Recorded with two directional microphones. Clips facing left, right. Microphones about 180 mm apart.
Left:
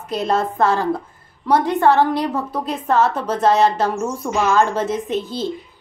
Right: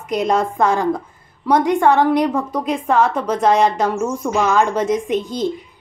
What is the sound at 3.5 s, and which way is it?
A woman's voice, 15° right (ahead or behind).